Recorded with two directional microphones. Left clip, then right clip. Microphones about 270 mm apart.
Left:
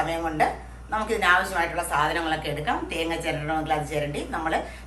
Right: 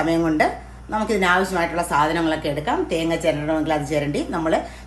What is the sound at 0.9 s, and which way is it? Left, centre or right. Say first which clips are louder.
A woman's voice: right 2 dB; right.